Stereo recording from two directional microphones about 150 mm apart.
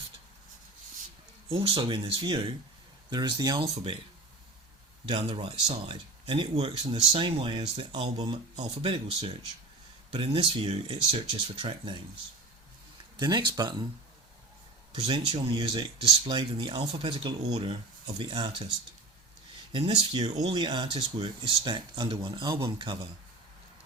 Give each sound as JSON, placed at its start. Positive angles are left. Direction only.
{"t": 1.5, "sound": "speech", "side_deg": -40}
{"t": 5.0, "sound": "speech", "side_deg": -35}
{"t": 13.1, "sound": "speech", "side_deg": -25}
{"t": 14.9, "sound": "speech", "side_deg": -30}
{"t": 19.7, "sound": "speech", "side_deg": -30}